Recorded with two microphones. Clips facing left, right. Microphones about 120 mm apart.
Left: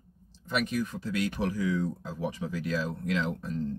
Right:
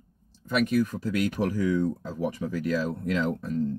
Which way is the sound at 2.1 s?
50° right (ahead or behind).